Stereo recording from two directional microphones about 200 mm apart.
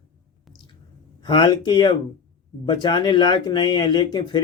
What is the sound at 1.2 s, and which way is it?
Speech, 20° left (ahead or behind).